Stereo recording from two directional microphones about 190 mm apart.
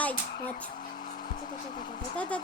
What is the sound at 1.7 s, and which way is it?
Speech, 25° left (ahead or behind).